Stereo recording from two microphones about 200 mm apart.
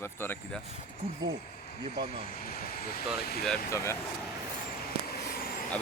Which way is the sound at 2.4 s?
50° left (ahead or behind).